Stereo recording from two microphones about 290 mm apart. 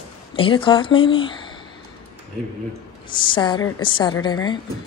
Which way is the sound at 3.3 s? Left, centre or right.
Centre.